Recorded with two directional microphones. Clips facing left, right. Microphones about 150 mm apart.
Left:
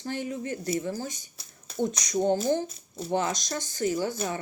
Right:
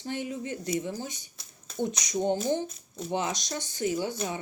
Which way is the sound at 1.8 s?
20° right (ahead or behind).